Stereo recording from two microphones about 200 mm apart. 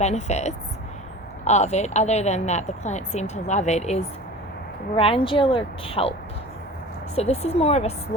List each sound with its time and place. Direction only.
0.0 s a woman's voice: 35° left (ahead or behind)
7.2 s a woman's voice: 30° left (ahead or behind)